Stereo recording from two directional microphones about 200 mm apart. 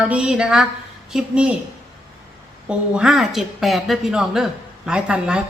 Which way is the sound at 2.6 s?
5° right (ahead or behind).